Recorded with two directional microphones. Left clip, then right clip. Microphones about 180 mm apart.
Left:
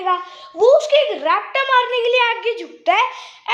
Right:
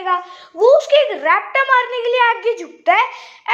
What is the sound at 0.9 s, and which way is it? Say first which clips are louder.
Speech: right 2 dB; 5° right (ahead or behind).